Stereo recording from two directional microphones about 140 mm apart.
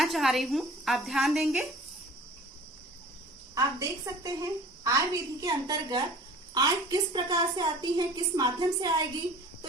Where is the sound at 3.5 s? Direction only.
25° right (ahead or behind).